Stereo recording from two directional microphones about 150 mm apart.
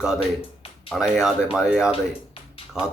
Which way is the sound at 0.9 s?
5° right (ahead or behind).